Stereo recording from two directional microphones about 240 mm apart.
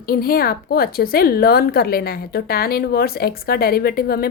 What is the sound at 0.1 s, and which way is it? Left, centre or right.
A woman's voice, left.